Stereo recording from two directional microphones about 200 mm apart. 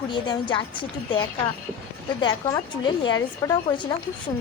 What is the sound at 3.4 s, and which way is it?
Speech, 15° left (ahead or behind).